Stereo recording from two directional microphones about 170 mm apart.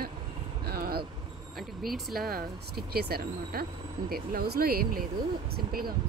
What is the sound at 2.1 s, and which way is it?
Speech, 65° right (ahead or behind).